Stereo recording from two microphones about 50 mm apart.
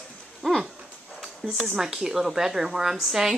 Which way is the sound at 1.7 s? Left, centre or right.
Centre.